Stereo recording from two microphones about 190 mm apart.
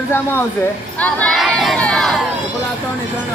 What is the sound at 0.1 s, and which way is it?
Speech, 15° left (ahead or behind).